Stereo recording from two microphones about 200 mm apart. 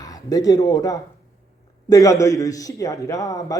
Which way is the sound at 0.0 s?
15° left (ahead or behind).